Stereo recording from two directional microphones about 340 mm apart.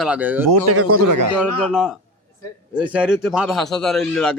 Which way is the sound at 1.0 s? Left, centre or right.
Right.